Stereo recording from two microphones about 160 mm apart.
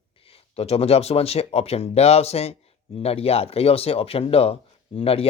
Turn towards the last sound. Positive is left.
turn(degrees=40)  # may be behind; listen again after turning